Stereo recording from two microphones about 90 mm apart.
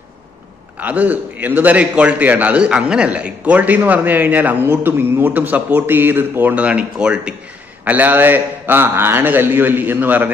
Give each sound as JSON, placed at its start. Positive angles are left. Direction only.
{"t": 0.7, "sound": "a man's voice", "side_deg": -20}